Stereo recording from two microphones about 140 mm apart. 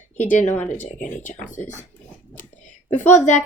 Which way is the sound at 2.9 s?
60° left (ahead or behind).